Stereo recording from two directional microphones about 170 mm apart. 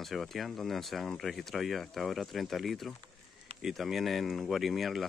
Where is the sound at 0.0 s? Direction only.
Centre (ahead or behind).